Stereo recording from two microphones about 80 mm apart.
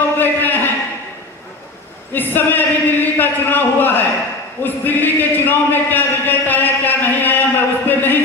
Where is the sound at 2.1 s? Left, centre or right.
Left.